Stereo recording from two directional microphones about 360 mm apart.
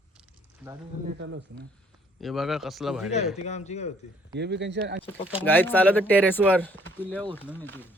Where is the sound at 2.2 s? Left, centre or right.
Centre.